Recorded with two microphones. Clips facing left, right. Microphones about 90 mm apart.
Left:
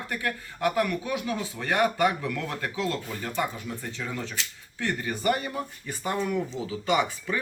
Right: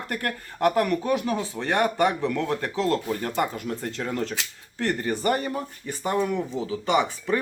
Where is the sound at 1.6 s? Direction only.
30° right (ahead or behind).